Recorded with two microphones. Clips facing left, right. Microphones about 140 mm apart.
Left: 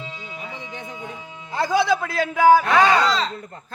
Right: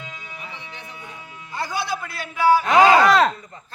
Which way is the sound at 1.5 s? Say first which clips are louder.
Left 7 dB; 90° left.